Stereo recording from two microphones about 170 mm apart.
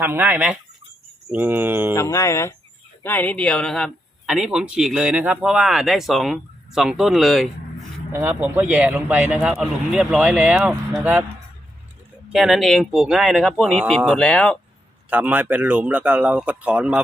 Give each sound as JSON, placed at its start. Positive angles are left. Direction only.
{"t": 0.0, "sound": "a man's voice", "side_deg": -10}
{"t": 1.9, "sound": "speech", "side_deg": 20}
{"t": 8.1, "sound": "a man's voice", "side_deg": -10}
{"t": 12.3, "sound": "speech", "side_deg": 0}
{"t": 15.1, "sound": "a man's voice", "side_deg": -10}